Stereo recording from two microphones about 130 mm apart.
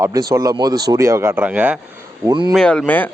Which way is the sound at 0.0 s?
25° right (ahead or behind).